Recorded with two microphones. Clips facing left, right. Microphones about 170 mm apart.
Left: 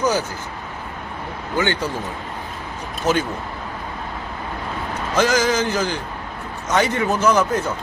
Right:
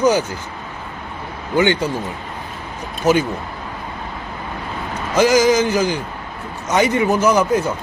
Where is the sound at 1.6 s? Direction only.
15° right (ahead or behind).